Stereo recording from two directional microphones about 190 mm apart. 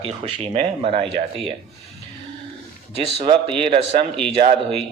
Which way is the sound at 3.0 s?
30° right (ahead or behind).